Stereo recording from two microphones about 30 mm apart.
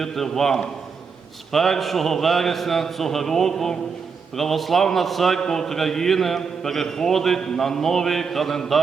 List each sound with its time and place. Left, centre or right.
0.0 s a man's voice: centre